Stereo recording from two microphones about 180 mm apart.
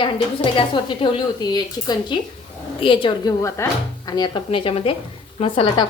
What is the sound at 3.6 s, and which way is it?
Speech, 15° left (ahead or behind).